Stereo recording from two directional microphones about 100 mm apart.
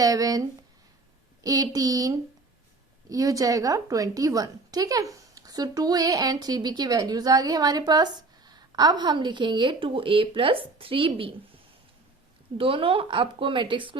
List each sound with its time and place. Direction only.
0.0 s a woman's voice: 35° right (ahead or behind)
1.5 s a woman's voice: 40° right (ahead or behind); by 11.3 s 65° right (ahead or behind)
12.5 s speech: 65° right (ahead or behind)